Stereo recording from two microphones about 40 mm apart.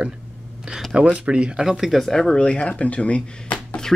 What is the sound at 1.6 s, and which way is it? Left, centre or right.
Speech, centre.